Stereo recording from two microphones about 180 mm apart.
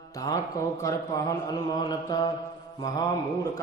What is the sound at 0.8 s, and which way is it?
Mantra, 20° left (ahead or behind).